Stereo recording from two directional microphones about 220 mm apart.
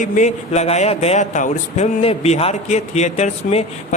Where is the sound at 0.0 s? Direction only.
35° left (ahead or behind).